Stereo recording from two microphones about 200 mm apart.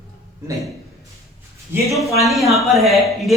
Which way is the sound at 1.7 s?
10° right (ahead or behind).